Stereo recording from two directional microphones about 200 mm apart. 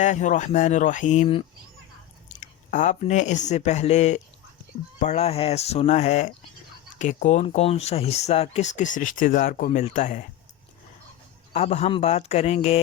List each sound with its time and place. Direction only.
0.0 s speech: 40° left (ahead or behind)
2.4 s speech: 40° left (ahead or behind)
9.8 s speech: 35° left (ahead or behind)
11.5 s speech: 30° left (ahead or behind)